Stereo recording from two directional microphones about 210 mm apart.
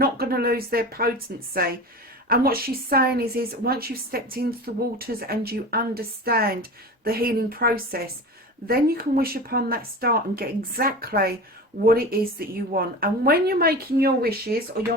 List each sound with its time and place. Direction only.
0.0 s a woman's voice: 45° right (ahead or behind)
2.3 s a woman's voice: 45° right (ahead or behind)